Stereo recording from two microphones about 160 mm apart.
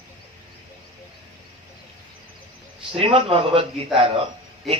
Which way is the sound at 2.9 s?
35° right (ahead or behind).